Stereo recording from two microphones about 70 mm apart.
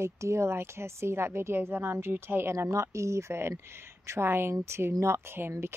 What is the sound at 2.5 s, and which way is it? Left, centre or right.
Speech, right.